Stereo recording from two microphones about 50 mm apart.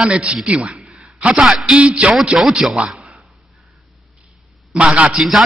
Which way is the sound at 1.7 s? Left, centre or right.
Right.